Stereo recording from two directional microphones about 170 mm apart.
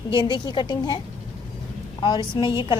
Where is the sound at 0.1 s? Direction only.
30° left (ahead or behind).